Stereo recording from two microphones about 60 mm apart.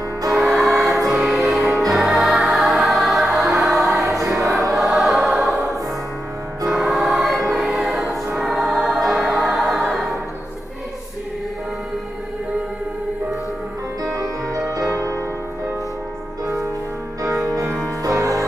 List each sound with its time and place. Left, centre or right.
0.3 s music: centre
4.7 s choir: centre
6.8 s choir: centre
8.4 s music: centre
14.1 s music: right
14.9 s music: right
17.2 s music: right